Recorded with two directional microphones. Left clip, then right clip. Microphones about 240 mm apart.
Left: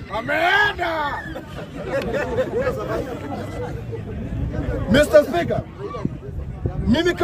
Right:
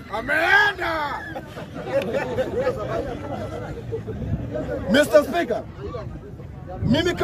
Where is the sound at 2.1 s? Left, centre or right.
Centre.